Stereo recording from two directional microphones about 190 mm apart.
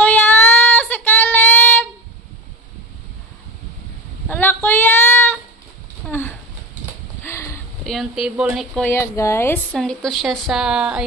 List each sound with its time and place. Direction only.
0.0 s child singing: 10° left (ahead or behind)
4.3 s a sound: 10° left (ahead or behind)
7.8 s speech: centre (ahead or behind)
8.9 s speech: 15° left (ahead or behind); by 11.1 s 5° right (ahead or behind)